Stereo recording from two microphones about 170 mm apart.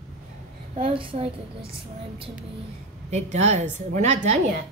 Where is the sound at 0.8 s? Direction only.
35° right (ahead or behind).